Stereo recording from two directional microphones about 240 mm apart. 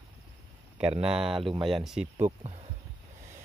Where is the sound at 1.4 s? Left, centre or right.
Right.